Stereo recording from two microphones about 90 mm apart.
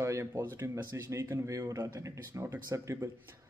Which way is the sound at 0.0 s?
30° right (ahead or behind).